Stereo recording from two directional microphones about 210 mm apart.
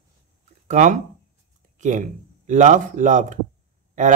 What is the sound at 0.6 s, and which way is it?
Speech, 35° right (ahead or behind).